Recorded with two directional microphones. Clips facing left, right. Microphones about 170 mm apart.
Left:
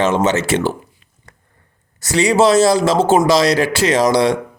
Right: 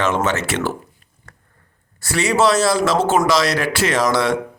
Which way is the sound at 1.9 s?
25° left (ahead or behind).